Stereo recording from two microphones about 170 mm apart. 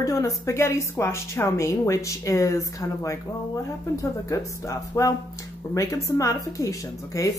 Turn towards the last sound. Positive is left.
turn(degrees=20)  # may be behind; listen again after turning